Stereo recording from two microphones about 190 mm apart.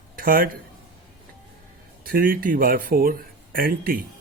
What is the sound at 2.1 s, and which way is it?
Speech, 50° right (ahead or behind).